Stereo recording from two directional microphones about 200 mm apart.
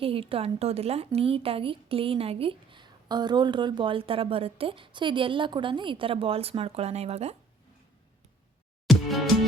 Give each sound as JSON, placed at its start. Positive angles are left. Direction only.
{"t": 0.0, "sound": "speech", "side_deg": -25}
{"t": 8.9, "sound": "music", "side_deg": 0}